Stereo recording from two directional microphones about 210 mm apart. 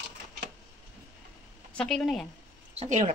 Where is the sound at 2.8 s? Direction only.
35° right (ahead or behind).